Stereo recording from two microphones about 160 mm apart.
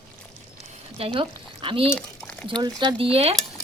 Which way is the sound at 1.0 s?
35° right (ahead or behind).